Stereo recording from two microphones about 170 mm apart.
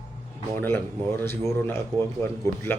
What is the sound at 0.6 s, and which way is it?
Speech, 10° left (ahead or behind).